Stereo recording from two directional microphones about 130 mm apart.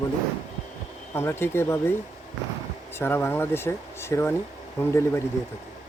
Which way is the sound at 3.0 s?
20° left (ahead or behind).